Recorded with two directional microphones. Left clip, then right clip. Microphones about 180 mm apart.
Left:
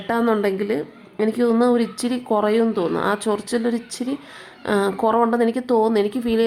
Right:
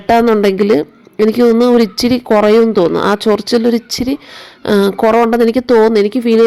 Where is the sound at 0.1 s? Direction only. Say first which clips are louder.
Right 10 dB; 30° right (ahead or behind).